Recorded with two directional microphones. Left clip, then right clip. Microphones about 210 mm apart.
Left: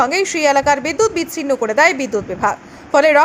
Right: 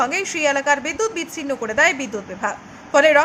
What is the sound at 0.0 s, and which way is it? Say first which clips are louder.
A woman's voice: left 5 dB; 20° left (ahead or behind).